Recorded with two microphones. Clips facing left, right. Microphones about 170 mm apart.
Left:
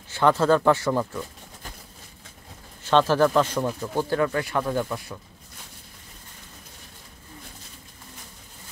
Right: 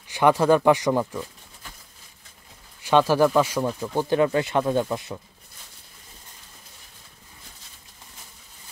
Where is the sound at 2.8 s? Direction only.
10° right (ahead or behind).